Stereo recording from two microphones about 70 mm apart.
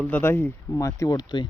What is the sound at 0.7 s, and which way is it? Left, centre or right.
Speech, left.